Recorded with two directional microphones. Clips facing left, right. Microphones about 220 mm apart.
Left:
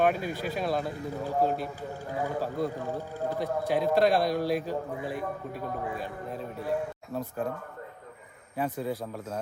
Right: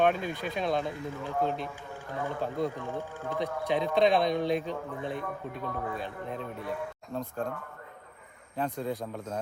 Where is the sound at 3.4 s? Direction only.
Centre (ahead or behind).